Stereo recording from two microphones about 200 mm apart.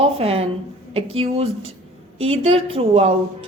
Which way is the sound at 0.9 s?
30° right (ahead or behind).